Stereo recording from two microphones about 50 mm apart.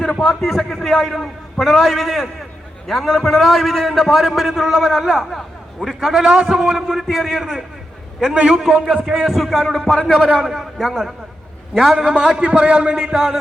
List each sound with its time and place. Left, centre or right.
0.2 s a man's voice: centre
5.3 s a man's voice: centre
6.2 s a man's voice: centre
6.6 s a man's voice: centre
9.3 s a man's voice: centre
10.8 s a man's voice: centre